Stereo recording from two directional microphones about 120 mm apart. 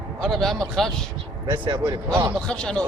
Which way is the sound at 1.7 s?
25° right (ahead or behind).